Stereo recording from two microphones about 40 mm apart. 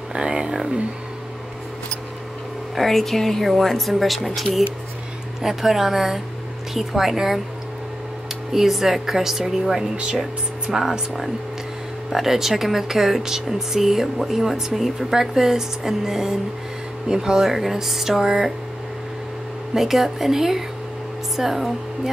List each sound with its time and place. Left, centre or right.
0.1 s a sound: centre
2.7 s speech: centre
5.4 s speech: centre
8.5 s speech: centre
19.7 s speech: centre